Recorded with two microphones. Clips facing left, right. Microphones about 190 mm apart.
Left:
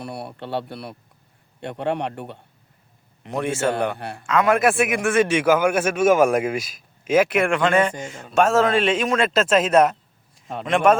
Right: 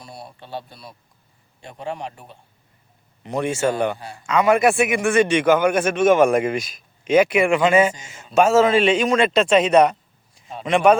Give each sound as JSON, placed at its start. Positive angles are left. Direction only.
{"t": 0.0, "sound": "a man's voice", "side_deg": 65}
{"t": 3.2, "sound": "a man's voice", "side_deg": 0}
{"t": 3.9, "sound": "a man's voice", "side_deg": 60}
{"t": 4.2, "sound": "a man's voice", "side_deg": 0}